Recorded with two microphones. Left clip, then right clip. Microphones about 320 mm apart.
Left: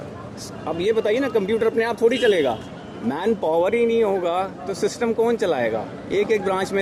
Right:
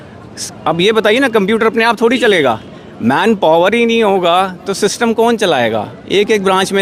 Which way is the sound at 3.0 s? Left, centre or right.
Right.